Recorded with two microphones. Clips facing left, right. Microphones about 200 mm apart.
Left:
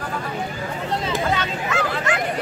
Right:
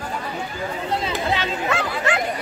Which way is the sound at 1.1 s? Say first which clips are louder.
Left 1 dB; 45° left (ahead or behind).